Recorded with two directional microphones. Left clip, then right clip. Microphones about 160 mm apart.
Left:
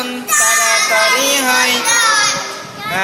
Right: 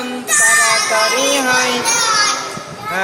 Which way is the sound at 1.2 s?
20° right (ahead or behind).